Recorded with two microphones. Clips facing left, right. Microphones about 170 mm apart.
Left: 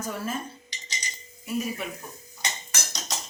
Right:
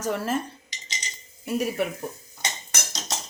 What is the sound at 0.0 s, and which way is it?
Speech, 80° right.